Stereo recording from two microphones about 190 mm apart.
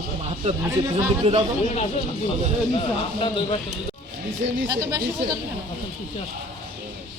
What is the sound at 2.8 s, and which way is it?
Speech, 30° left (ahead or behind).